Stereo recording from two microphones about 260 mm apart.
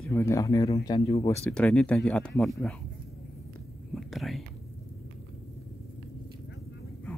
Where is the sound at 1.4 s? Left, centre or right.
Centre.